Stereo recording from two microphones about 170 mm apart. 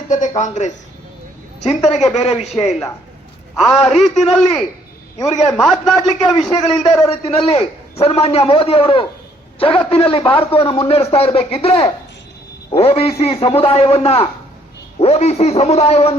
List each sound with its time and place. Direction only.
0.1 s a man's voice: 45° left (ahead or behind)
3.5 s a man's voice: centre (ahead or behind)
7.0 s a man's voice: 40° left (ahead or behind)